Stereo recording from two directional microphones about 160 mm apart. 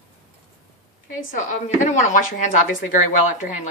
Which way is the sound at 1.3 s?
55° left (ahead or behind).